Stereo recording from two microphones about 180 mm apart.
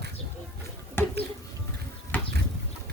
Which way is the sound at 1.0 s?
10° left (ahead or behind).